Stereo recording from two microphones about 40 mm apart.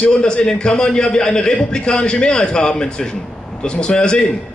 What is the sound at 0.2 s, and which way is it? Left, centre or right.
A man's voice, left.